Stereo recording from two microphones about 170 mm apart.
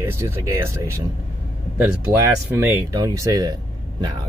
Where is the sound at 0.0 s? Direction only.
15° right (ahead or behind).